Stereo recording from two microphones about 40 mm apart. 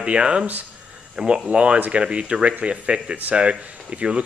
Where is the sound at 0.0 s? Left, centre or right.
Right.